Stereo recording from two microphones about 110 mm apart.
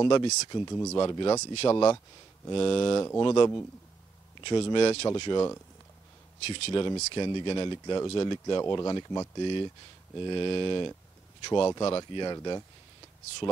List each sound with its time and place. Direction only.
0.0 s speech: 45° left (ahead or behind)
0.6 s speech: 25° left (ahead or behind)
0.9 s speech: 40° left (ahead or behind)
1.4 s speech: 65° left (ahead or behind)
2.5 s speech: 50° left (ahead or behind)
5.1 s speech: 45° left (ahead or behind)
6.4 s speech: 65° left (ahead or behind)
6.7 s speech: 45° left (ahead or behind)
9.4 s speech: 45° left (ahead or behind)